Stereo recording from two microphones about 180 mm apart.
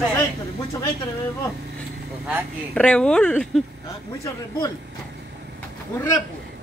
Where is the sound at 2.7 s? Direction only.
5° left (ahead or behind).